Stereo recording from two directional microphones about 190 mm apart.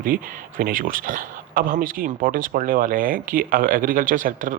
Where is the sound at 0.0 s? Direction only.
45° right (ahead or behind).